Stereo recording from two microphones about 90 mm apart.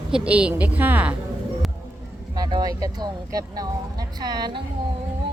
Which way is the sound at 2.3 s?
45° right (ahead or behind).